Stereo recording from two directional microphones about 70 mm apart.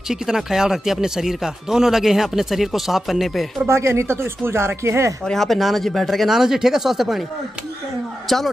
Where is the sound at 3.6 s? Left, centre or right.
Right.